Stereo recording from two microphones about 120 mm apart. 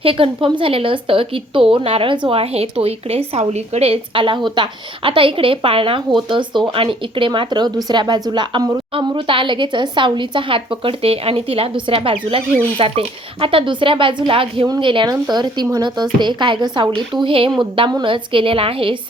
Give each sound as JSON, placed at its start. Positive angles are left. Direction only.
{"t": 0.0, "sound": "a woman's voice", "side_deg": -50}
{"t": 9.0, "sound": "a woman's voice", "side_deg": -45}